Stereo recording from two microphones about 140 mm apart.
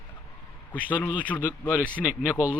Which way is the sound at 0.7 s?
10° left (ahead or behind).